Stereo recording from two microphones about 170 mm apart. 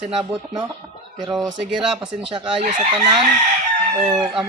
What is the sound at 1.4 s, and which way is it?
Speech, 5° right (ahead or behind).